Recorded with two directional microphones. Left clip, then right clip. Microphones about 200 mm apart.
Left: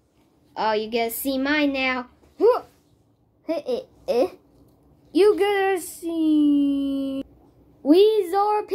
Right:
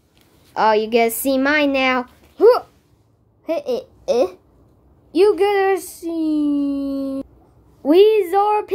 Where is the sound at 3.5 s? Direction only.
10° right (ahead or behind).